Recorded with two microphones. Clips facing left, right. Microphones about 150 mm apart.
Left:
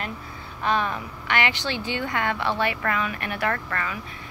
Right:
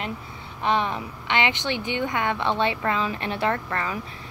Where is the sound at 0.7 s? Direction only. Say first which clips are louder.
Right 1 dB; 20° right (ahead or behind).